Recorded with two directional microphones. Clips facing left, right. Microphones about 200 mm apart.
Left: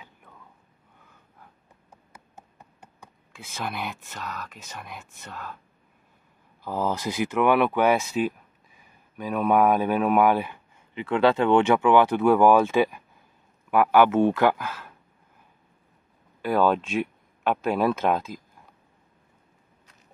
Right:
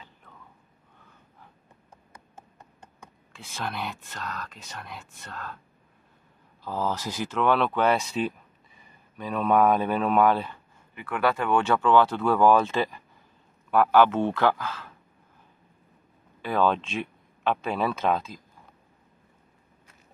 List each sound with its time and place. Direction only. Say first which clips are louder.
0.0 s a sound: left 1 dB; 10° left (ahead or behind)
3.3 s speech: left 1 dB; 5° left (ahead or behind)
6.6 s speech: left 2 dB; 15° left (ahead or behind)
11.1 s speech: left 5 dB; 25° left (ahead or behind)
16.3 s speech: left 3 dB; 10° left (ahead or behind)